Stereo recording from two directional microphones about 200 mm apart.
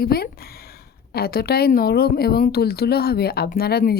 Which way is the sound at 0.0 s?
50° left (ahead or behind).